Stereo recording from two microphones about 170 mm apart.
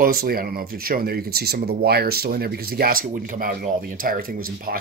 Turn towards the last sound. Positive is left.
turn(degrees=-55)  # may be behind; listen again after turning